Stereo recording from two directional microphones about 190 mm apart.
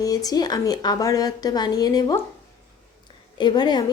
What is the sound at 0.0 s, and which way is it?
Speech, 20° left (ahead or behind).